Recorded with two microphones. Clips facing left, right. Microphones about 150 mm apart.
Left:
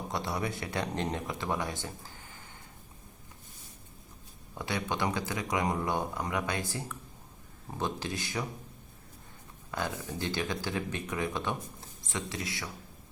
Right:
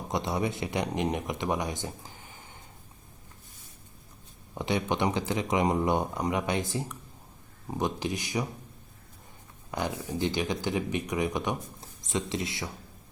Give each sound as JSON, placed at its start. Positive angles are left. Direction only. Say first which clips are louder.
{"t": 0.1, "sound": "speech", "louder": "right 5 dB", "side_deg": -20}
{"t": 4.5, "sound": "speech", "louder": "right 5 dB", "side_deg": -20}
{"t": 9.7, "sound": "speech", "louder": "right 4 dB", "side_deg": -15}